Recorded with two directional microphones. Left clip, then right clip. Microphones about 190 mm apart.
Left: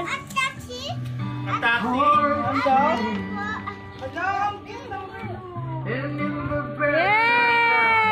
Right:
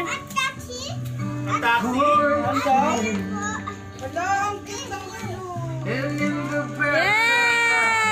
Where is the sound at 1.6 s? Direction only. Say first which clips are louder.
Even; 10° right (ahead or behind).